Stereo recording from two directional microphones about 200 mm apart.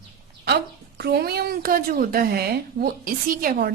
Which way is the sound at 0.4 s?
55° right (ahead or behind).